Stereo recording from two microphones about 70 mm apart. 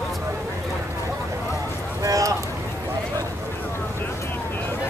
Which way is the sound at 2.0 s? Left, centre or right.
Right.